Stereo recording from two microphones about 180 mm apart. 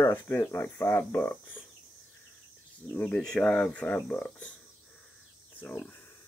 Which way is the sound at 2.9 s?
5° left (ahead or behind).